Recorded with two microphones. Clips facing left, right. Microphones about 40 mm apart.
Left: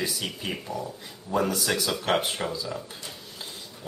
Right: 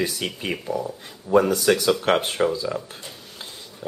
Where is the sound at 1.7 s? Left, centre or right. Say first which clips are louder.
Right 8 dB; right.